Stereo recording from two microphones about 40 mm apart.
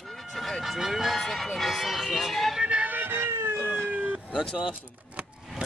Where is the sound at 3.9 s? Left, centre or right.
Right.